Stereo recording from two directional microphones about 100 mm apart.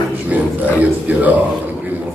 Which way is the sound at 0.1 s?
15° right (ahead or behind).